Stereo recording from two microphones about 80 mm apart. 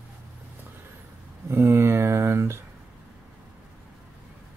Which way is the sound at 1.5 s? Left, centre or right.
Right.